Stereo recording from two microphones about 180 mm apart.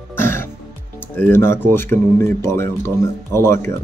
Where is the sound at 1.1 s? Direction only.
10° left (ahead or behind).